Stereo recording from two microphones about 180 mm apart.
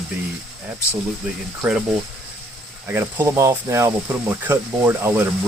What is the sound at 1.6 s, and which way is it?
Speech, 5° right (ahead or behind).